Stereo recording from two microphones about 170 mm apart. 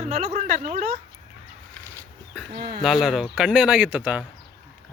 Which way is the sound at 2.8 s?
Centre (ahead or behind).